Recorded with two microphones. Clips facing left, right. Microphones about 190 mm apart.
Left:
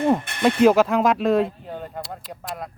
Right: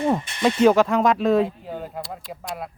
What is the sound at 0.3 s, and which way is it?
Speech, 60° left (ahead or behind).